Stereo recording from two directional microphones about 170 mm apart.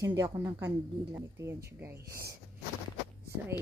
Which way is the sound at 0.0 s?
20° right (ahead or behind).